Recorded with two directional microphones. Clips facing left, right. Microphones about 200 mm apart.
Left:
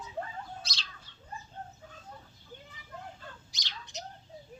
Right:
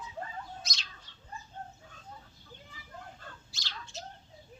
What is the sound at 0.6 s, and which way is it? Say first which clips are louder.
Bird: left 1 dB; 30° left (ahead or behind).